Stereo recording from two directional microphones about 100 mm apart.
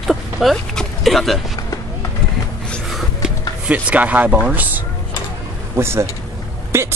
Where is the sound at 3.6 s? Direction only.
15° right (ahead or behind).